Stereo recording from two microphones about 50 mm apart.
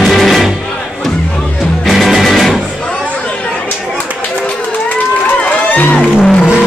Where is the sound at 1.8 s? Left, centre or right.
Centre.